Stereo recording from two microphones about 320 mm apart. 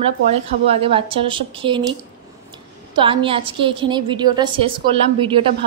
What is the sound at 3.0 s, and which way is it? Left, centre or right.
A woman's voice, centre.